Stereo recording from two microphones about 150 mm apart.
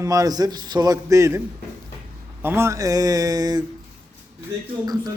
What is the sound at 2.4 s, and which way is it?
A man's voice, 15° right (ahead or behind).